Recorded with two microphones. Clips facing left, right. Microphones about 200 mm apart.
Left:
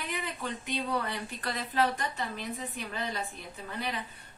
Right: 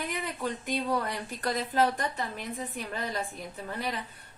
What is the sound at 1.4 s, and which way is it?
Speech, 40° right (ahead or behind).